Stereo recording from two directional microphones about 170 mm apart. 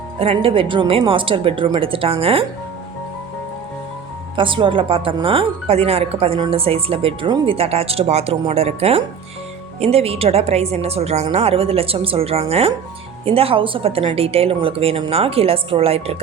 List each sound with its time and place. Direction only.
0.2 s speech: 35° right (ahead or behind)
4.4 s speech: 30° right (ahead or behind)